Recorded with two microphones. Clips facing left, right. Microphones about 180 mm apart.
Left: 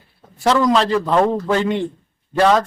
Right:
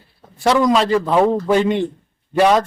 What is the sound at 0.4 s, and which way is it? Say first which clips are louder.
A man's voice: right 1 dB; 10° right (ahead or behind).